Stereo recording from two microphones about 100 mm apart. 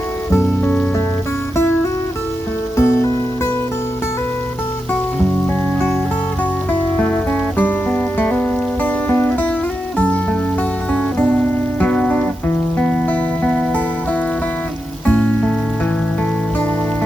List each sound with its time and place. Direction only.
0.3 s rain on surface: 20° left (ahead or behind)
2.7 s music: 25° left (ahead or behind)
6.7 s music: 10° left (ahead or behind)
11.3 s music: 10° left (ahead or behind)
15.0 s music: 15° left (ahead or behind)